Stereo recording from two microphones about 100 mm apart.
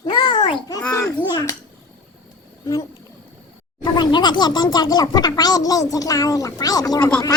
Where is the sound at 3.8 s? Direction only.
50° left (ahead or behind).